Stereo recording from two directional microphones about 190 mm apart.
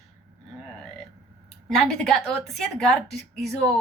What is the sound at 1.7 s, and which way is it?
Speech, centre (ahead or behind).